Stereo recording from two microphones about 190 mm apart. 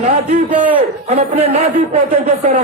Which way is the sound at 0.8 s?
30° right (ahead or behind).